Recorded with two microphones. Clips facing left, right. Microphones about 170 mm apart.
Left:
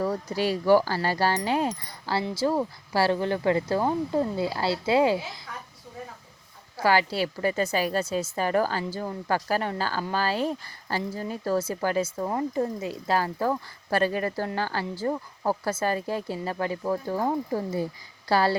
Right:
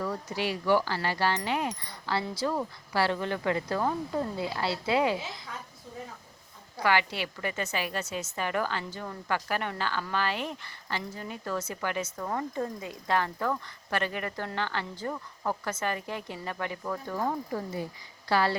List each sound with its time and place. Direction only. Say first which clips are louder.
0.0 s speech: left 5 dB; 40° left (ahead or behind)
6.8 s speech: left 4 dB; 35° left (ahead or behind)